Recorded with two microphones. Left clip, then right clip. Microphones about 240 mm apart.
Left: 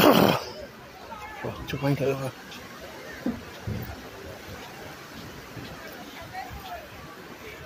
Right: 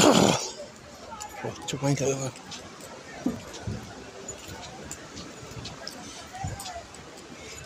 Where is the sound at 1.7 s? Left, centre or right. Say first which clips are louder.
Left 1 dB; centre.